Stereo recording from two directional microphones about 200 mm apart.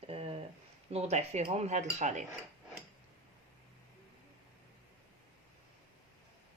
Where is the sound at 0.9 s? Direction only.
30° right (ahead or behind).